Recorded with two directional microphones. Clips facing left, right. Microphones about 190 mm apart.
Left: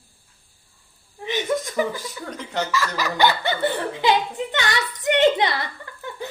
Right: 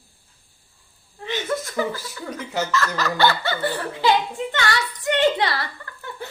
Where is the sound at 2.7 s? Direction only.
10° left (ahead or behind).